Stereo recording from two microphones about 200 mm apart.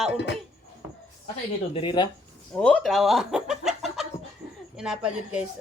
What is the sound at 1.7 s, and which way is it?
Speech, 25° left (ahead or behind).